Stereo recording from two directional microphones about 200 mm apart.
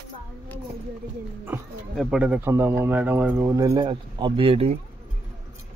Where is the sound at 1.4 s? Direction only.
5° right (ahead or behind); by 4.8 s 30° right (ahead or behind).